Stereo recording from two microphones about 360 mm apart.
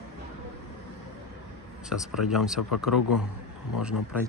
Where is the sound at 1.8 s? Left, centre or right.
Centre.